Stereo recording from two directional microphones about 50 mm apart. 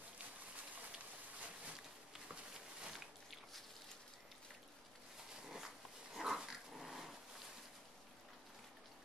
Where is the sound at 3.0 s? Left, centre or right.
Centre.